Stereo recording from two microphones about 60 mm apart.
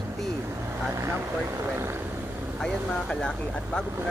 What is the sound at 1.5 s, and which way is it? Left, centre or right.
Speech, right.